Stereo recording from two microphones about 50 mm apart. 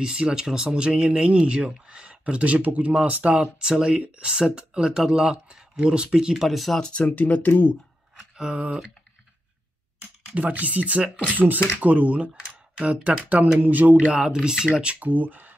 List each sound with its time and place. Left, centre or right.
0.0 s speech: centre
3.5 s speech: centre
7.1 s speech: left
8.4 s speech: right
10.3 s speech: right; by 14.7 s centre
15.0 s speech: right